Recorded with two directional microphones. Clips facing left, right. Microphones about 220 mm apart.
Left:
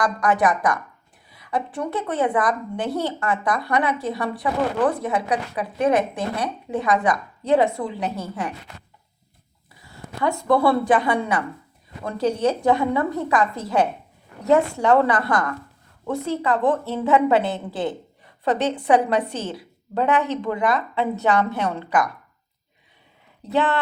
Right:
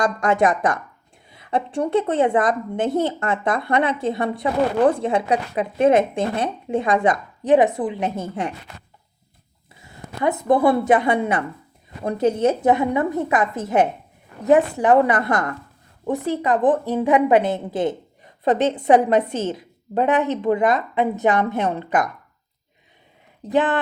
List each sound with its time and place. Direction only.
0.0 s a woman's voice: 25° right (ahead or behind)
9.8 s a woman's voice: 20° right (ahead or behind)
23.5 s speech: 15° right (ahead or behind)